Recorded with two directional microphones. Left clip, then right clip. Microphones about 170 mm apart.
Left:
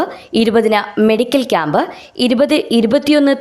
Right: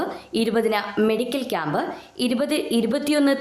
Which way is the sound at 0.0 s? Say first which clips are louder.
Left 9 dB; 45° left (ahead or behind).